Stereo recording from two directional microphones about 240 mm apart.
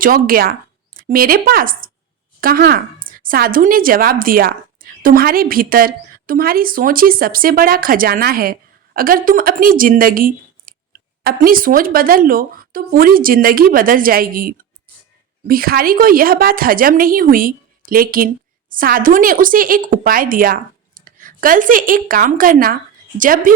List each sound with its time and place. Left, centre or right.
0.0 s a woman's voice: right